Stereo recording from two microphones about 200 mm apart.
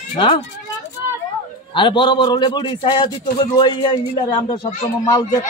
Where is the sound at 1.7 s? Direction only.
25° left (ahead or behind).